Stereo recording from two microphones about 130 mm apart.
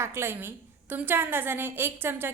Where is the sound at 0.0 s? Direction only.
20° right (ahead or behind).